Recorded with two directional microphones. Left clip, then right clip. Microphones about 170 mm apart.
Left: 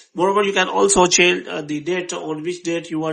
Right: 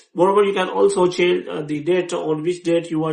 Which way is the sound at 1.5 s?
30° left (ahead or behind).